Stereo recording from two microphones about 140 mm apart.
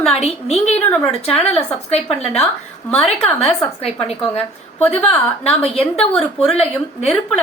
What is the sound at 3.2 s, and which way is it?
Speech, 45° left (ahead or behind).